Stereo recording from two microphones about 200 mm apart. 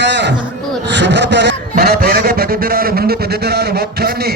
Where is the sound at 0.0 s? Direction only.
60° right (ahead or behind).